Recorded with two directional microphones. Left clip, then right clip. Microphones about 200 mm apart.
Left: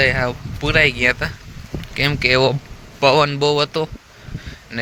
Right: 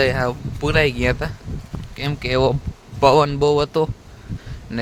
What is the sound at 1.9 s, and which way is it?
Speech, 5° right (ahead or behind).